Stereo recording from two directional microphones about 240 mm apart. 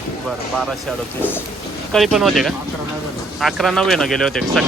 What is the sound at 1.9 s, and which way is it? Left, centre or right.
Speech, centre.